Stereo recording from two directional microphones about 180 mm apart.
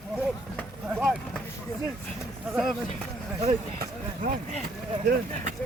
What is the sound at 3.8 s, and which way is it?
Speech, 55° right (ahead or behind).